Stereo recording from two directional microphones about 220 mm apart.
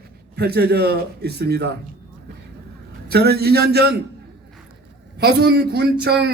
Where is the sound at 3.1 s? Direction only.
45° right (ahead or behind).